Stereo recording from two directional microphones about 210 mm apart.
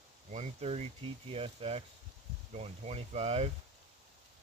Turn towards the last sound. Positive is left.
turn(degrees=-30)  # may be behind; listen again after turning